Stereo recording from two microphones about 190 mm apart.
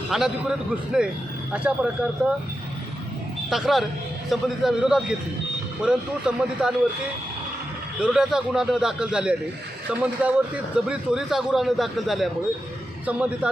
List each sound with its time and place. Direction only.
0.1 s a man's voice: centre (ahead or behind)
3.5 s a man's voice: centre (ahead or behind)
8.0 s a man's voice: 5° right (ahead or behind)